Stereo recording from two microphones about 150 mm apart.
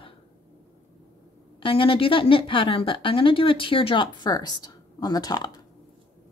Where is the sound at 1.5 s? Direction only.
35° left (ahead or behind).